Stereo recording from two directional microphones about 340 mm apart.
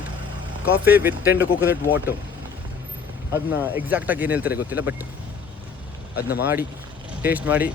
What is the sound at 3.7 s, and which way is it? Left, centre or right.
Speech, centre.